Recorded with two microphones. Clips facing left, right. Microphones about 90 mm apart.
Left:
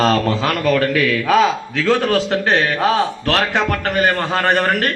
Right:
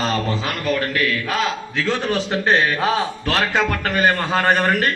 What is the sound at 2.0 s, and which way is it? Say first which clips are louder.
Speech: left 4 dB; 90° left.